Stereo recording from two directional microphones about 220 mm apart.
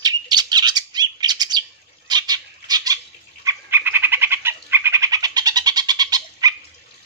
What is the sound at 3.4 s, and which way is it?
Bird, 15° right (ahead or behind).